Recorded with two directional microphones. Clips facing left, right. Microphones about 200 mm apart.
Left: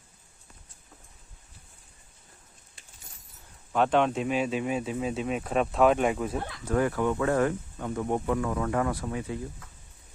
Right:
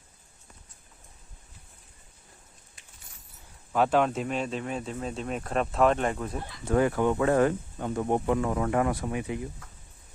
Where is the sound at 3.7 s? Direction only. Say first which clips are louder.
Even; 5° right (ahead or behind).